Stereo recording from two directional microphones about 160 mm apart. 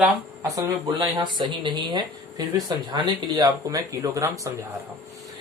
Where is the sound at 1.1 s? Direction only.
30° right (ahead or behind).